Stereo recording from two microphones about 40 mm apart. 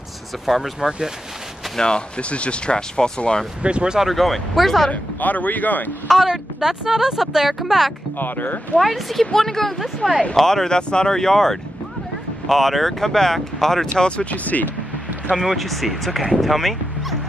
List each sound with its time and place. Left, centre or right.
0.7 s speech: centre
1.8 s speech: left
3.6 s speech: right
4.0 s speech: centre
4.9 s speech: left
6.0 s speech: centre
8.2 s speech: left
8.7 s speech: centre
13.9 s speech: left
14.3 s speech: left
15.3 s speech: centre